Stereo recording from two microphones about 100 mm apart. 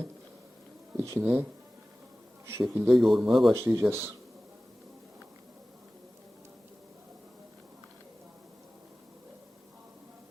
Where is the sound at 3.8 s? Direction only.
25° right (ahead or behind).